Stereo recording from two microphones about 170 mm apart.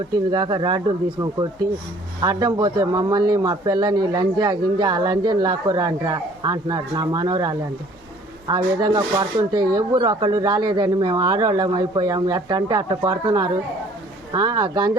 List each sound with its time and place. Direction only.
0.3 s a man's voice: 25° right (ahead or behind)
2.2 s a man's voice: 20° right (ahead or behind)